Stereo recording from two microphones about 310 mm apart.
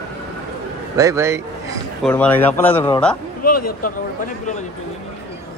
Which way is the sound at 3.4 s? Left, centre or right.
Left.